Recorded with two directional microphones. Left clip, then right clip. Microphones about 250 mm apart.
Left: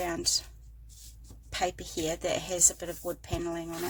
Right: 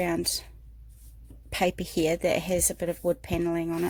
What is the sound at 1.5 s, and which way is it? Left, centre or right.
Speech, right.